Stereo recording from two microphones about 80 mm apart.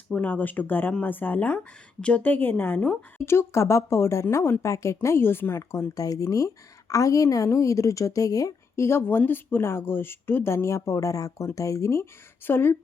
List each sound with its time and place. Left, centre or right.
0.1 s a woman's voice: left
3.2 s a woman's voice: left
6.0 s a woman's voice: left